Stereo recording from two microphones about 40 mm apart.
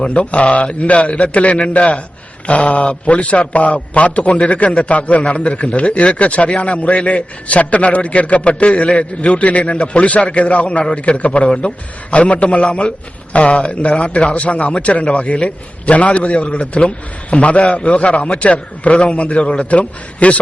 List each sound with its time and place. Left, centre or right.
0.1 s a man's voice: left
2.7 s a man's voice: left